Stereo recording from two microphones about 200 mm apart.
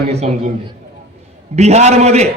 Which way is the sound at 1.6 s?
35° right (ahead or behind).